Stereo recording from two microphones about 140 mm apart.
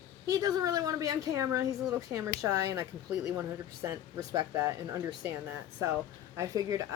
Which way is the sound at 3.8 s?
20° right (ahead or behind).